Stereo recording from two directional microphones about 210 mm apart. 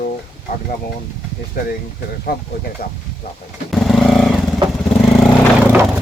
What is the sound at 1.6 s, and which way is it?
Speech, 45° left (ahead or behind).